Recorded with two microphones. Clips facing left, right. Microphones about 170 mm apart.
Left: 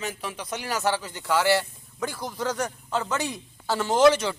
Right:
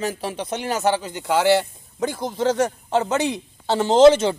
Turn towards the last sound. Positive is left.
turn(degrees=-25)  # may be behind; listen again after turning